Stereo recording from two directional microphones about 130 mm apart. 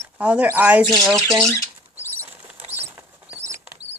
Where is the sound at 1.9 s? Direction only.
15° right (ahead or behind).